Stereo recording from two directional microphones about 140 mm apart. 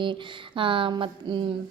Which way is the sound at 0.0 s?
35° right (ahead or behind).